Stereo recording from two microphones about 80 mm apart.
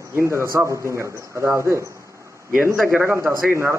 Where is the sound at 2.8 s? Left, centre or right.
Right.